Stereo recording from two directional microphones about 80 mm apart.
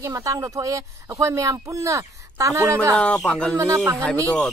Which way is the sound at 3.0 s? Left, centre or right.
Centre.